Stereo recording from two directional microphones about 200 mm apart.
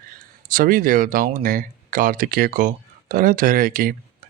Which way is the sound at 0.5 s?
45° right (ahead or behind).